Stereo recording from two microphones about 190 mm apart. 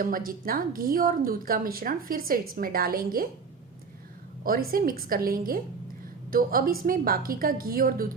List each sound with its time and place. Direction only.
0.0 s speech: 50° right (ahead or behind)
4.7 s speech: 50° right (ahead or behind)